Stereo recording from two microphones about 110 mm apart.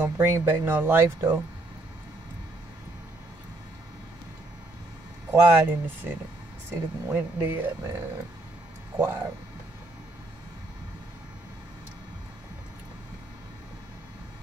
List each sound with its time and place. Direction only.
0.0 s speech: 20° right (ahead or behind)
5.3 s speech: 20° right (ahead or behind)
8.9 s speech: 20° right (ahead or behind)